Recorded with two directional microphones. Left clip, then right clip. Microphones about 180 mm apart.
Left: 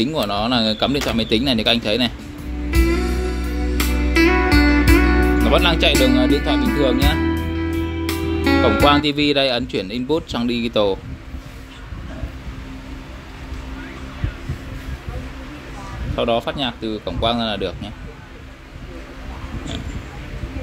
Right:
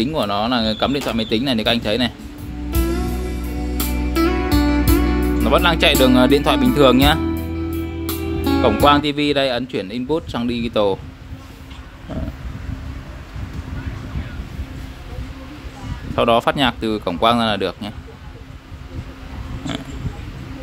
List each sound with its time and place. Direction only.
0.0 s speech: 5° right (ahead or behind)
2.7 s music: 20° right (ahead or behind)
7.2 s speech: 15° right (ahead or behind)
16.2 s speech: 20° right (ahead or behind)